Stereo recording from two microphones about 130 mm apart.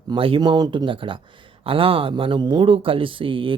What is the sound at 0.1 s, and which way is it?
Speech, 40° right (ahead or behind).